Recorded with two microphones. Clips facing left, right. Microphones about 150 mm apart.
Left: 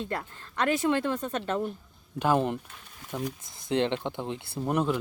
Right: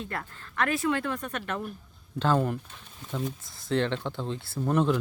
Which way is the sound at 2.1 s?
15° left (ahead or behind).